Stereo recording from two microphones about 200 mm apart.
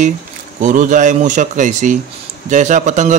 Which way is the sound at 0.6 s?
40° right (ahead or behind).